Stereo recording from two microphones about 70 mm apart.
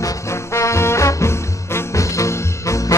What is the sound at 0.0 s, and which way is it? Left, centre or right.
Music, left.